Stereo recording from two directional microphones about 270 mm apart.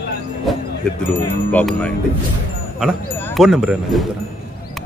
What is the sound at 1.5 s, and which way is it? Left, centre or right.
Speech, centre.